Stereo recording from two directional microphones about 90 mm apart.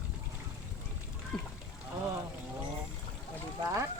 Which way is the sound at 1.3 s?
5° left (ahead or behind).